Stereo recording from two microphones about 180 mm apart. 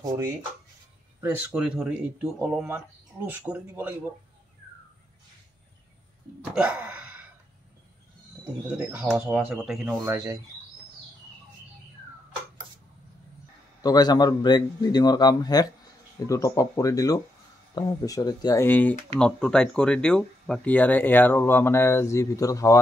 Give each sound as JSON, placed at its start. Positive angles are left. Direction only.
{"t": 1.2, "sound": "speech", "side_deg": -10}
{"t": 6.5, "sound": "a sound", "side_deg": -5}
{"t": 8.6, "sound": "speech", "side_deg": -10}
{"t": 13.7, "sound": "a man's voice", "side_deg": 20}